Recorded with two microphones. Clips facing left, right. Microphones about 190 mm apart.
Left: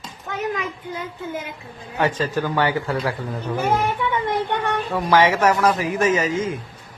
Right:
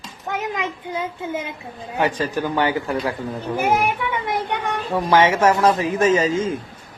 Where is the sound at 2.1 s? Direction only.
15° right (ahead or behind).